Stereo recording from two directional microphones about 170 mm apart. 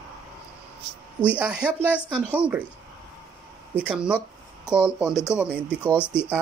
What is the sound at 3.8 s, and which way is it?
Speech, 5° right (ahead or behind).